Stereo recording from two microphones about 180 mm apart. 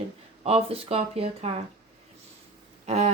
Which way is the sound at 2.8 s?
40° right (ahead or behind).